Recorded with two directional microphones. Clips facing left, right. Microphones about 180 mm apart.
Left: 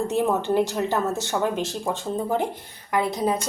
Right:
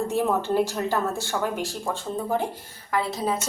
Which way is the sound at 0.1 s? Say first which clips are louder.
Left 2 dB; 20° left (ahead or behind).